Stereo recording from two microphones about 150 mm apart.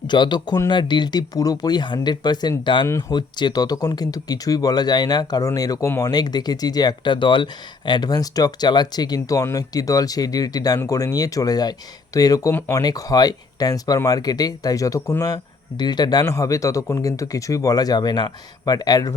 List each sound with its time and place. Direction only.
0.1 s speech: 30° left (ahead or behind)
2.8 s speech: 20° left (ahead or behind)
3.2 s speech: 30° left (ahead or behind)
12.8 s speech: 25° left (ahead or behind)